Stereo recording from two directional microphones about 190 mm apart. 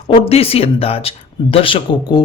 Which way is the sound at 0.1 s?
30° left (ahead or behind).